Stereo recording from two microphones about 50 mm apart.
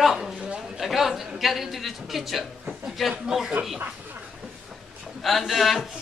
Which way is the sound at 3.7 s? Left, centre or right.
Right.